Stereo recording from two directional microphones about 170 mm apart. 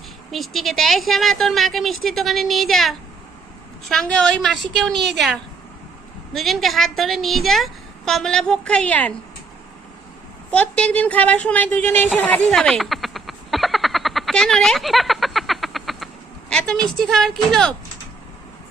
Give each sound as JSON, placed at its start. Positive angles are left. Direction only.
{"t": 0.3, "sound": "a woman's voice", "side_deg": 0}
{"t": 6.3, "sound": "a woman's voice", "side_deg": 0}
{"t": 10.5, "sound": "speech", "side_deg": 5}
{"t": 12.1, "sound": "frog", "side_deg": 10}
{"t": 16.5, "sound": "a woman's voice", "side_deg": 5}